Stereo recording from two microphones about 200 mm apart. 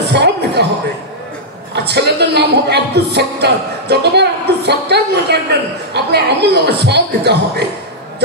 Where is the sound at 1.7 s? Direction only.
55° right (ahead or behind).